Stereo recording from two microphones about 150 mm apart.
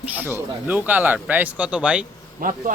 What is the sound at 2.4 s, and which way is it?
Speech, 60° right (ahead or behind).